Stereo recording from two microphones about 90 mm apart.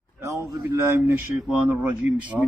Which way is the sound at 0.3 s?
30° right (ahead or behind).